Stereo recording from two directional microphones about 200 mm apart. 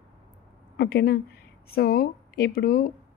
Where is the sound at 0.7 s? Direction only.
55° left (ahead or behind).